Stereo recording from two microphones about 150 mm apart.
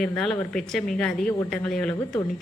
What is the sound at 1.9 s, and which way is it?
Speech, 15° left (ahead or behind).